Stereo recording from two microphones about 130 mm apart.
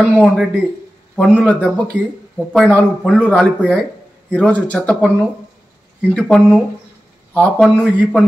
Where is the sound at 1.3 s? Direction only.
10° left (ahead or behind).